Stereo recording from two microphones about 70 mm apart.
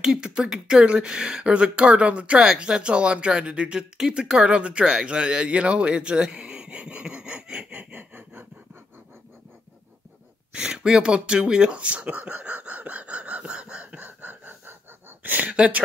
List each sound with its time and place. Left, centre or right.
0.0 s speech: centre
10.5 s speech: centre